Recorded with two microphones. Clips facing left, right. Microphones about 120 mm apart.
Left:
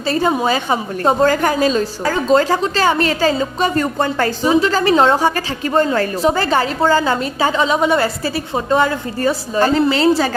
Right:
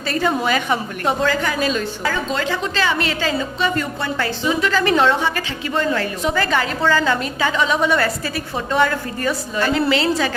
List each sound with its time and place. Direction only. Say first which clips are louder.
0.1 s a woman's voice: left 3 dB; 30° left (ahead or behind)
1.3 s a woman's voice: left 5 dB; 45° left (ahead or behind)